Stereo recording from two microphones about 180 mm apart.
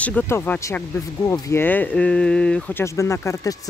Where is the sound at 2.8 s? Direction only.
15° left (ahead or behind).